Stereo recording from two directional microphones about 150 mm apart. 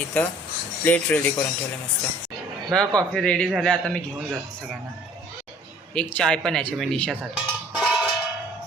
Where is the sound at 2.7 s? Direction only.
5° left (ahead or behind).